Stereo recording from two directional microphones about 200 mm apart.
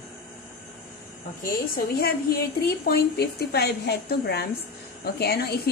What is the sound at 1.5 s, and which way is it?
Speech, 50° left (ahead or behind).